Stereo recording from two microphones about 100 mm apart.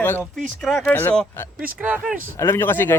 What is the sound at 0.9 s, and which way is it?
Speech, 15° left (ahead or behind).